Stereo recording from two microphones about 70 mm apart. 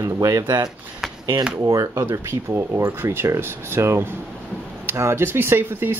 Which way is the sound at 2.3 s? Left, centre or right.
Right.